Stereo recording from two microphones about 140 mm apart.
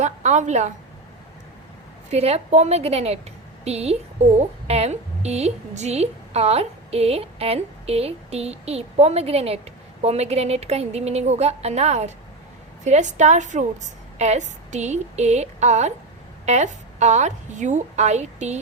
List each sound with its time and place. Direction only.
0.0 s a woman's voice: 55° right (ahead or behind)
2.0 s a woman's voice: 50° right (ahead or behind)